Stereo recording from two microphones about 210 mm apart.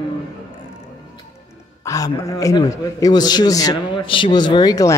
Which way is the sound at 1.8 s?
15° left (ahead or behind).